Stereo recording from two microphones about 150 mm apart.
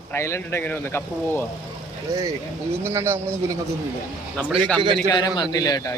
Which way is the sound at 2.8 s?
15° right (ahead or behind).